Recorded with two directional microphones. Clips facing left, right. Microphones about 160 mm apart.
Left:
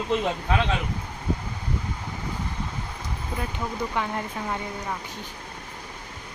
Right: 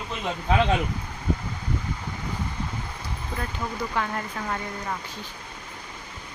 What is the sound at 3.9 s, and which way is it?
Speech, 15° left (ahead or behind).